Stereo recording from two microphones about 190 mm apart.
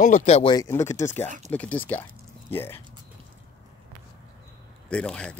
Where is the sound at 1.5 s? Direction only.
10° left (ahead or behind).